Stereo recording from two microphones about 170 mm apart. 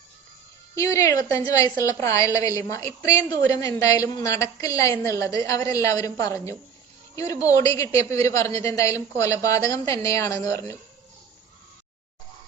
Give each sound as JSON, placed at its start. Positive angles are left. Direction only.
{"t": 0.8, "sound": "a woman's voice", "side_deg": 20}